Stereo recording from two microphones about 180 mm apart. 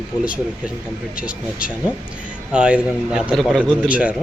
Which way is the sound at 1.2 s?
5° right (ahead or behind).